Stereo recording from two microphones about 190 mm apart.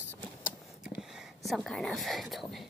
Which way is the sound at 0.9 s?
5° right (ahead or behind).